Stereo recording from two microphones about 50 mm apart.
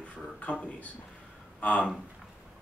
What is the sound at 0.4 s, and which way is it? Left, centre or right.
Speech, left.